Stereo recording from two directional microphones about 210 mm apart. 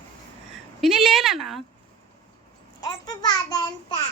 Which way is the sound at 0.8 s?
Centre (ahead or behind).